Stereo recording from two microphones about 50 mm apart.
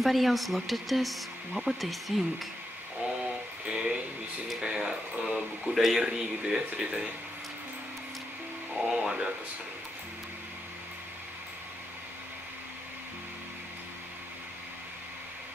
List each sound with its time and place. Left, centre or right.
0.0 s speech: centre
3.6 s a sound: centre
5.9 s speech: centre
8.8 s speech: centre